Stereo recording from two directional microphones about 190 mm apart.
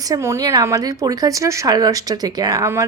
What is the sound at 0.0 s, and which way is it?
A woman's voice, 15° right (ahead or behind).